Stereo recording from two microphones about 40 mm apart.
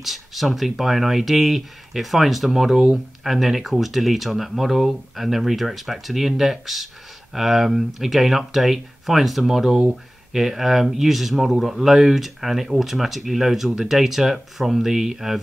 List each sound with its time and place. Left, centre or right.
0.0 s speech: centre